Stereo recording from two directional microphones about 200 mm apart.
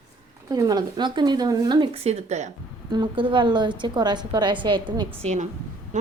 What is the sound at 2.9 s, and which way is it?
A woman's voice, 25° right (ahead or behind).